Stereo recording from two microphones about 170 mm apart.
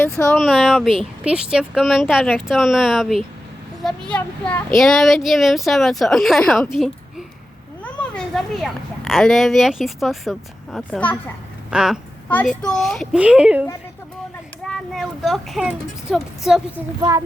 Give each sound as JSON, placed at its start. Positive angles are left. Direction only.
{"t": 0.3, "sound": "a woman's voice", "side_deg": 0}
{"t": 12.3, "sound": "a woman's voice", "side_deg": 5}
{"t": 17.0, "sound": "speech", "side_deg": -20}